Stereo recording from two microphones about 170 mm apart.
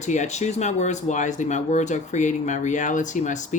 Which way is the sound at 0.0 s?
45° left (ahead or behind).